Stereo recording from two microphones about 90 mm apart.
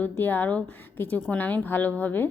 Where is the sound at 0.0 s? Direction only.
20° left (ahead or behind).